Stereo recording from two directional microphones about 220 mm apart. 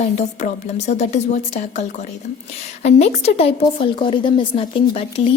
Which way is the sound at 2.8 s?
30° left (ahead or behind).